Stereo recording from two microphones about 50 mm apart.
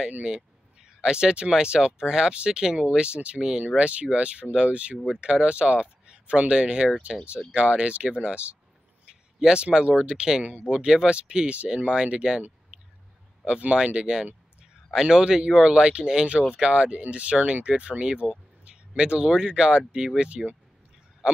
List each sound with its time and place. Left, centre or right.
0.2 s speech: centre
12.7 s a sound: right
13.5 s speech: right